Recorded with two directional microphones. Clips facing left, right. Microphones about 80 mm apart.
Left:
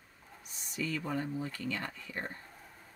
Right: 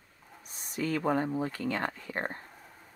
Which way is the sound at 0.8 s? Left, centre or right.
Right.